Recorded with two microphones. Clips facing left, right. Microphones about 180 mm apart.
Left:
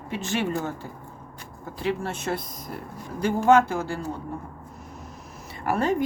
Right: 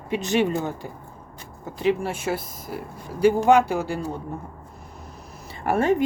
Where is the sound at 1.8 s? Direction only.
15° right (ahead or behind).